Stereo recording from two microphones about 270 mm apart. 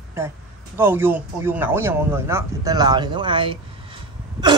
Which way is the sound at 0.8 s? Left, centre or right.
Centre.